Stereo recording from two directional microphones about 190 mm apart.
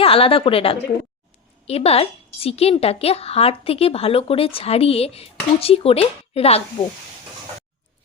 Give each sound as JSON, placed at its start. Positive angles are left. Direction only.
{"t": 0.0, "sound": "a woman's voice", "side_deg": 30}